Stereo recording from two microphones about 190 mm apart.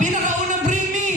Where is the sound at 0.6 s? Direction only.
40° right (ahead or behind).